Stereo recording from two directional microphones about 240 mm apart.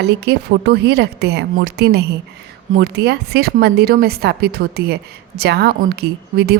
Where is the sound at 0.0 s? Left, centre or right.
Right.